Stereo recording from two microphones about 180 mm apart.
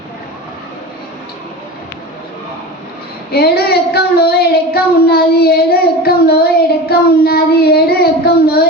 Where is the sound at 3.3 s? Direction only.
60° left (ahead or behind).